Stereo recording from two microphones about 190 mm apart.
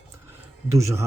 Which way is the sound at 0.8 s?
15° right (ahead or behind).